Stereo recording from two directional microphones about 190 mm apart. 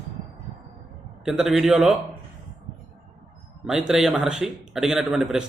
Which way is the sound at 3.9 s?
Centre (ahead or behind).